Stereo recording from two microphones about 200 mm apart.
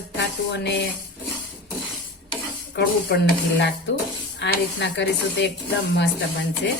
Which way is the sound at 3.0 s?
55° left (ahead or behind).